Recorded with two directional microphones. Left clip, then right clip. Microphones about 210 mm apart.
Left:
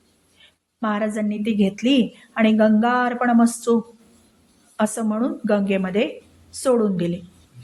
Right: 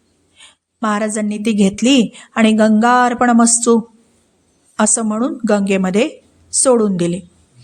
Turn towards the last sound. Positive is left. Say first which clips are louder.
# right 6 dB
turn(degrees=-25)  # may be behind; listen again after turning